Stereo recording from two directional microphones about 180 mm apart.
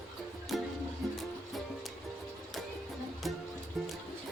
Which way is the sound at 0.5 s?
Centre (ahead or behind).